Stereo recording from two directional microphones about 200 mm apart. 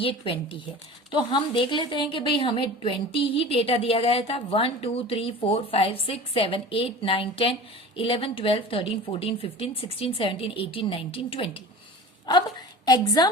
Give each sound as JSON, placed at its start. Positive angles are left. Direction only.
{"t": 0.0, "sound": "a woman's voice", "side_deg": 25}